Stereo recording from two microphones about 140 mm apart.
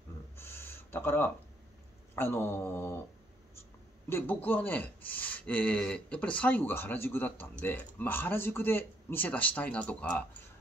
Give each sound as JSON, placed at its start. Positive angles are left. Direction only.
{"t": 0.4, "sound": "a sound", "side_deg": 15}
{"t": 2.1, "sound": "speech", "side_deg": 15}
{"t": 4.1, "sound": "speech", "side_deg": 15}